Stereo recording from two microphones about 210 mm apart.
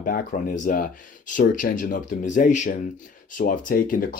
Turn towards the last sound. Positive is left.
turn(degrees=45)  # may be behind; listen again after turning